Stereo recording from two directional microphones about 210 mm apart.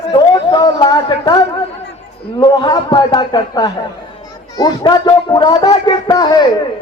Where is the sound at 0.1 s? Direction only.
20° left (ahead or behind).